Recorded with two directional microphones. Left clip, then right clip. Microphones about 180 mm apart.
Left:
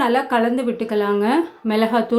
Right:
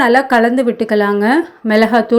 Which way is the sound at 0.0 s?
30° right (ahead or behind).